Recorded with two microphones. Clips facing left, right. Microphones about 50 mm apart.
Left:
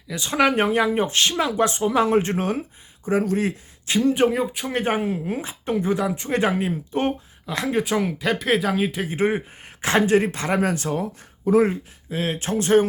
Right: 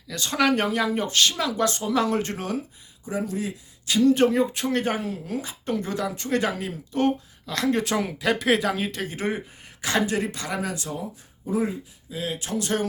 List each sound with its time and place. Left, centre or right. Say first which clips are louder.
0.1 s speech: left 2 dB; centre; by 3.5 s left
3.8 s speech: even; left
4.1 s speech: even; centre
4.7 s speech: left 3 dB; left